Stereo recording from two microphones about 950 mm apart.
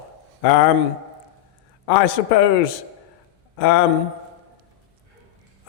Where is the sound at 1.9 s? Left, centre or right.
Left.